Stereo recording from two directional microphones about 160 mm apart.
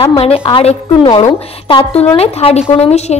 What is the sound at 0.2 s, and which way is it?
A woman's voice, 35° left (ahead or behind).